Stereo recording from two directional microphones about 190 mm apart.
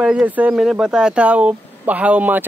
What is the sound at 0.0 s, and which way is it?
Speech, 5° right (ahead or behind).